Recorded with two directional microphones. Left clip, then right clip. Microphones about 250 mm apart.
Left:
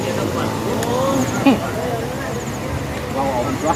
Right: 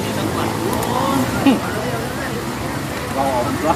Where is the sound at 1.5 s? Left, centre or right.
Left.